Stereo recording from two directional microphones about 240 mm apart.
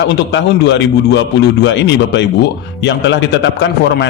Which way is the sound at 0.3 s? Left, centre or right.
Left.